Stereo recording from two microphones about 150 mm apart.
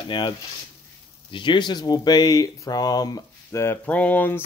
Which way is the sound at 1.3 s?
35° left (ahead or behind).